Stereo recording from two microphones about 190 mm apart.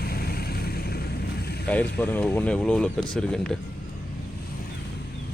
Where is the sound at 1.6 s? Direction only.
10° left (ahead or behind).